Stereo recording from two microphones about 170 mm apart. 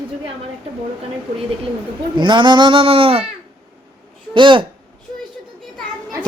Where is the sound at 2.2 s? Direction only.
25° right (ahead or behind).